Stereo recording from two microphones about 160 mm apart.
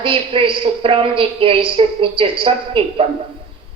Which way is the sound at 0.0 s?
35° right (ahead or behind).